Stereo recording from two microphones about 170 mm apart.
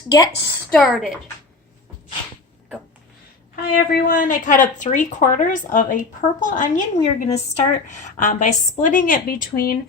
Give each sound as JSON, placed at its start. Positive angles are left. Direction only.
{"t": 0.1, "sound": "a woman's voice", "side_deg": 20}
{"t": 0.7, "sound": "speech", "side_deg": 5}
{"t": 3.5, "sound": "a woman's voice", "side_deg": 55}